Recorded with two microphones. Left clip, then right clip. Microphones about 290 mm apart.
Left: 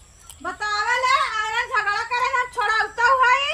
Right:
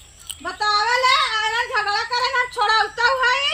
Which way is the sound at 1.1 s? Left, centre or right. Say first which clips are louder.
Right 2 dB; centre.